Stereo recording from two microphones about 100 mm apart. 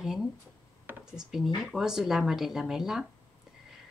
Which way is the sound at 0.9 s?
20° right (ahead or behind).